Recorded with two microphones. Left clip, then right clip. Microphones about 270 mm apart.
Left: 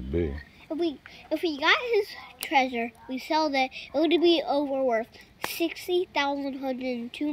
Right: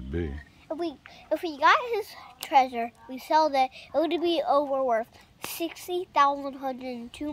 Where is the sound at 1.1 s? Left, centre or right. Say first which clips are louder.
Left 1 dB; right.